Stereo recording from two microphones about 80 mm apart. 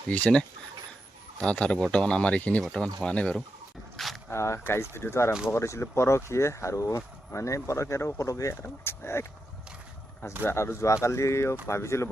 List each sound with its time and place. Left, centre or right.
0.1 s speech: centre
3.9 s a sound: centre
4.3 s speech: left
8.6 s speech: left
10.4 s speech: left